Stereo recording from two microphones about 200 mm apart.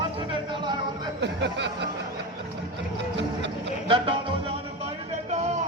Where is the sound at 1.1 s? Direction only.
60° right (ahead or behind).